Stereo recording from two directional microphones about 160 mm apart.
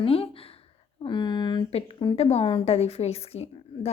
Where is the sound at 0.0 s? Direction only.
35° left (ahead or behind).